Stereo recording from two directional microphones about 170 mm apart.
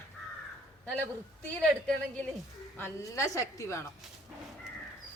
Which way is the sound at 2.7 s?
15° left (ahead or behind).